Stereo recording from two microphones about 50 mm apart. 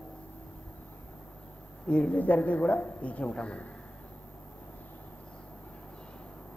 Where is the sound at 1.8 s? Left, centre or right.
Left.